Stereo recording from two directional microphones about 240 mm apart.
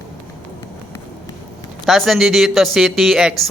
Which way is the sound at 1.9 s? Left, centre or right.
Centre.